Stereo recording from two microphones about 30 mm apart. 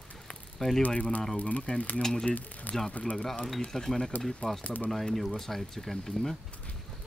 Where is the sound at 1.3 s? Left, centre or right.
Left.